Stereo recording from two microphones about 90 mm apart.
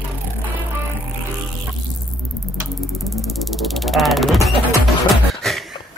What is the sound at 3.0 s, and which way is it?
Music, centre (ahead or behind).